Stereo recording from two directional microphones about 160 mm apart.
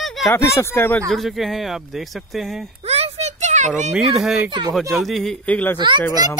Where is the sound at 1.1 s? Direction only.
Centre (ahead or behind).